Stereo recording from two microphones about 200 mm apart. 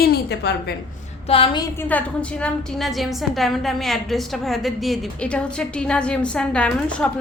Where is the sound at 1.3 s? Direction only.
25° left (ahead or behind).